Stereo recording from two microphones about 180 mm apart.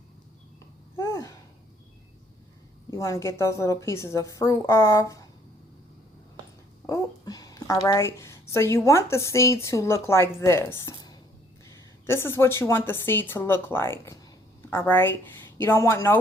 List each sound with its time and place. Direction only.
0.9 s a sound: 15° left (ahead or behind)
2.9 s a woman's voice: 15° left (ahead or behind)
6.8 s a woman's voice: 20° left (ahead or behind)